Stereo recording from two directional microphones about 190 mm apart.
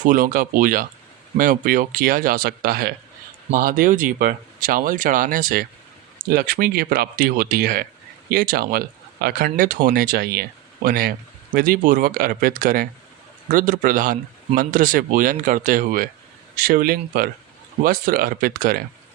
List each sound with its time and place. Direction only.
0.0 s speech: 45° right (ahead or behind)